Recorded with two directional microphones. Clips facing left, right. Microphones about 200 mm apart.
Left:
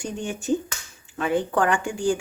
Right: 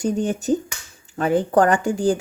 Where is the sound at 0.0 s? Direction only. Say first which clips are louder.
Right 8 dB; 40° right (ahead or behind).